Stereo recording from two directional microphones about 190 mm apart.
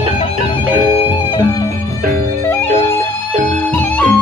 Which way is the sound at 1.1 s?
20° left (ahead or behind).